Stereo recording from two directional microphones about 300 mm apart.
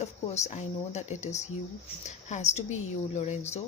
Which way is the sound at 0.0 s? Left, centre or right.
Left.